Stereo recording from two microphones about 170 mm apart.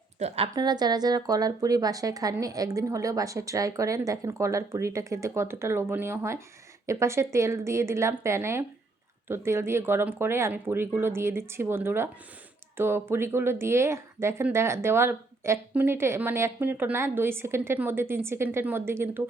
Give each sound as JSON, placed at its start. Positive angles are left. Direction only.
{"t": 0.2, "sound": "a woman's voice", "side_deg": -35}
{"t": 0.5, "sound": "a woman's voice", "side_deg": -25}